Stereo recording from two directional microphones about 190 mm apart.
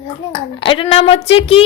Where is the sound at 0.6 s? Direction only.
25° left (ahead or behind).